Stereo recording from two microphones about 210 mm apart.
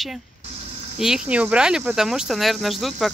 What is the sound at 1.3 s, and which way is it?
Speech, 5° right (ahead or behind).